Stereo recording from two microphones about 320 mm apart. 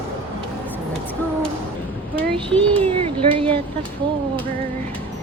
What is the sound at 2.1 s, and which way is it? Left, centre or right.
Child singing, centre.